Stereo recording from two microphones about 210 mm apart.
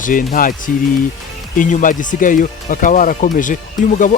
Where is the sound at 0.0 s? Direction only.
40° left (ahead or behind).